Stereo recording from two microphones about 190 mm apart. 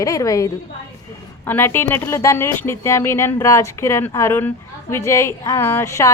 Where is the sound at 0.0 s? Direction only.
15° left (ahead or behind).